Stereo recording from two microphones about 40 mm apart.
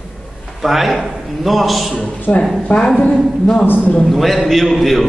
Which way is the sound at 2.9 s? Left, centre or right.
Centre.